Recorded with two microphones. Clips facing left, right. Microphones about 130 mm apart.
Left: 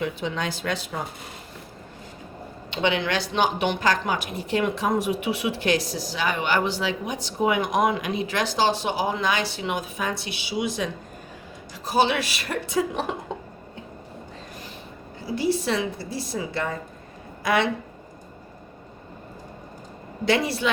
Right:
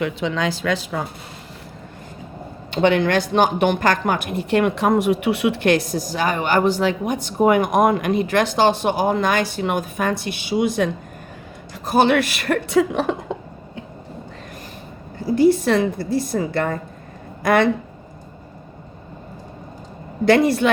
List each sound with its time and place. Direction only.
0.0 s speech: 90° right
2.6 s speech: 45° right (ahead or behind); by 13.1 s 80° right
15.3 s speech: 50° right (ahead or behind)
20.2 s speech: 50° right (ahead or behind)